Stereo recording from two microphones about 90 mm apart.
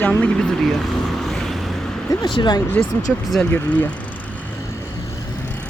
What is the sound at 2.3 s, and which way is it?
Speech, 60° left (ahead or behind).